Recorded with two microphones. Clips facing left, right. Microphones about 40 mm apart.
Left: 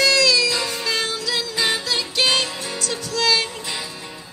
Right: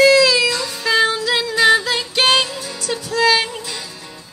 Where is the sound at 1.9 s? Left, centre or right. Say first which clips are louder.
Right 3 dB; right.